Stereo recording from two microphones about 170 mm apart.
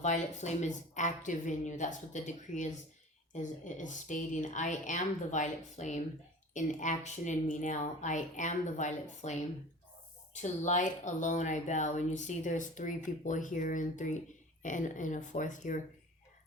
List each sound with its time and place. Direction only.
0.0 s speech: 45° left (ahead or behind)